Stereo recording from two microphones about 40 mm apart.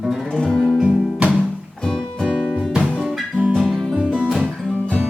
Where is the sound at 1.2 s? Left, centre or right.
Right.